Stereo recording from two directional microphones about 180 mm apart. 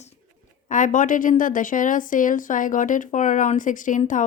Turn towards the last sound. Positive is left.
turn(degrees=45)  # may be behind; listen again after turning